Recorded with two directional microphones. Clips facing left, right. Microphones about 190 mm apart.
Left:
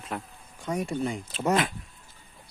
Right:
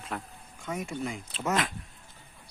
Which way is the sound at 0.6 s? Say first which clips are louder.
Left 5 dB; 35° left (ahead or behind).